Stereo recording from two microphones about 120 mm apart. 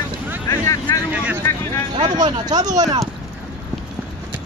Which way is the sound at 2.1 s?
35° right (ahead or behind).